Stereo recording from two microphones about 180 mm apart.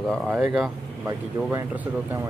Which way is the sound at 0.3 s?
5° right (ahead or behind).